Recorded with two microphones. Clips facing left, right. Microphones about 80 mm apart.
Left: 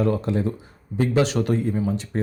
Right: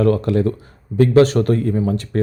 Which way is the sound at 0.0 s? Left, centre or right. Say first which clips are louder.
Right 6 dB; right.